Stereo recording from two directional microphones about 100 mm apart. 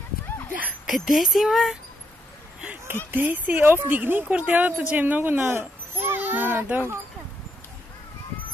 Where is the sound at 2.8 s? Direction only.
20° right (ahead or behind).